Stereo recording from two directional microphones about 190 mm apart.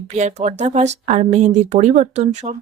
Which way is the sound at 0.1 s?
40° right (ahead or behind).